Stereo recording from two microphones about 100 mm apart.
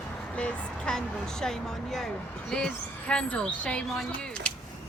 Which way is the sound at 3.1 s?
10° left (ahead or behind).